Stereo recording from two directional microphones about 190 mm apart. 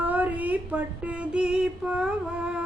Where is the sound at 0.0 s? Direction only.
10° right (ahead or behind).